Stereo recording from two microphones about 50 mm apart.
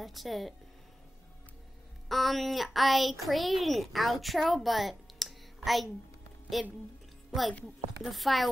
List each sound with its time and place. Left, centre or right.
0.0 s speech: centre
2.0 s speech: centre
7.2 s a child's voice: centre